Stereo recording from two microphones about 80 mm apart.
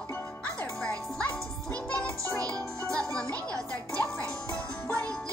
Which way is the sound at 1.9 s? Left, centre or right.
Centre.